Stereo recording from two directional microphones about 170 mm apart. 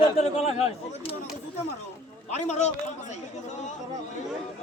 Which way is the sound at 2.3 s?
40° left (ahead or behind).